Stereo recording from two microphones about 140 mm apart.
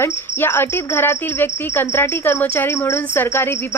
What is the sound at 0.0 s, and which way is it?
Speech, 15° left (ahead or behind).